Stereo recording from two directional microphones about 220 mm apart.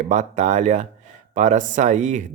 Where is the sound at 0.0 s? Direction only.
30° right (ahead or behind).